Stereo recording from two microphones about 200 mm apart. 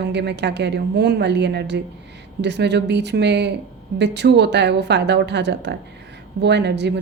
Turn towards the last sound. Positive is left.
turn(degrees=-60)  # may be behind; listen again after turning